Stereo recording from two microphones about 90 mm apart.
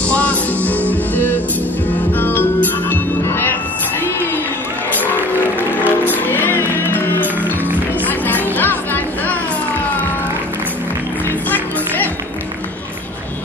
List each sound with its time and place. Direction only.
0.1 s music: 15° left (ahead or behind)
5.8 s music: 20° left (ahead or behind)
8.3 s music: 20° left (ahead or behind)